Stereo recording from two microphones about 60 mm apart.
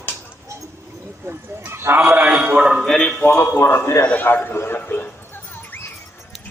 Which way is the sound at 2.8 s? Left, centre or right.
Centre.